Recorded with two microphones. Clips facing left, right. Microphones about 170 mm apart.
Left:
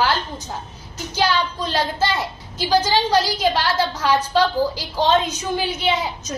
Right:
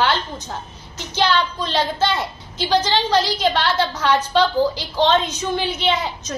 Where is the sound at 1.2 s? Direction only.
10° left (ahead or behind).